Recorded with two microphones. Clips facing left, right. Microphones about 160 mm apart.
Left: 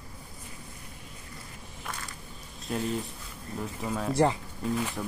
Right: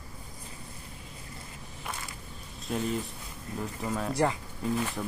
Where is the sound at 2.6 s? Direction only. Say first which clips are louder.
Even; centre (ahead or behind).